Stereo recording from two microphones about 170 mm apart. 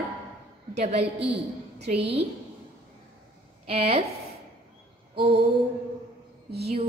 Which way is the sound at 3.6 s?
35° right (ahead or behind).